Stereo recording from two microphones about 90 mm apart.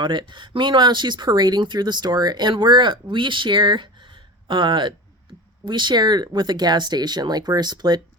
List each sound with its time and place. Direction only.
0.0 s speech: 60° right (ahead or behind)